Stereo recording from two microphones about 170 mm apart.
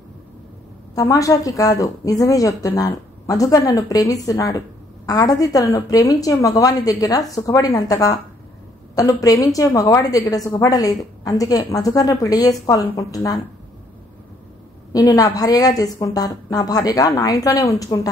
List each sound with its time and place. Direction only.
0.9 s a woman's voice: 20° left (ahead or behind)
14.9 s a woman's voice: 20° left (ahead or behind)